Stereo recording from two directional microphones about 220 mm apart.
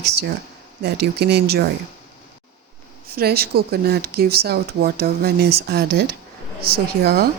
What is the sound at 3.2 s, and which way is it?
Speech, 45° right (ahead or behind).